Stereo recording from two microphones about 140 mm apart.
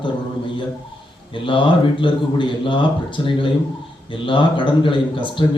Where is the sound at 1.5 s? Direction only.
35° left (ahead or behind).